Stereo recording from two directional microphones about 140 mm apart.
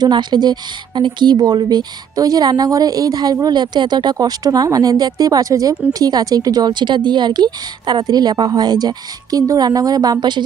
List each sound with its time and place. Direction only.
0.0 s speech: 30° right (ahead or behind)